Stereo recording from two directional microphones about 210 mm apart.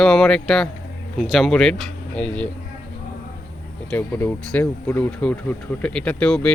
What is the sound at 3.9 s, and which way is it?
Speech, 10° left (ahead or behind).